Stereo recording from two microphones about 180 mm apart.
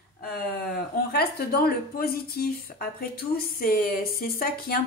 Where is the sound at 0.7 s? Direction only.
60° left (ahead or behind).